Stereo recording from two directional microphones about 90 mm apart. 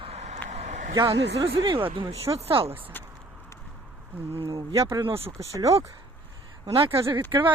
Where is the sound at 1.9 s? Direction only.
80° right.